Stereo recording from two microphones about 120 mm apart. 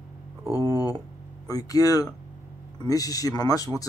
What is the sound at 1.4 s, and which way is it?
Speech, 30° left (ahead or behind).